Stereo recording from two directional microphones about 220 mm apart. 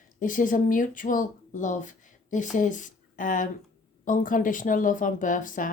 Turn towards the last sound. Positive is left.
turn(degrees=35)  # may be behind; listen again after turning